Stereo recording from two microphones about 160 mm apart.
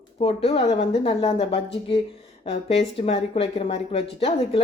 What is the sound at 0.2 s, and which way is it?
A woman's voice, 35° left (ahead or behind).